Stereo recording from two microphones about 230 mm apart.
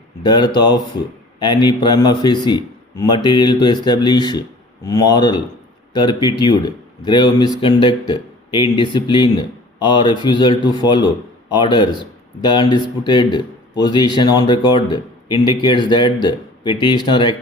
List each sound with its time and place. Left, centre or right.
0.2 s speech: centre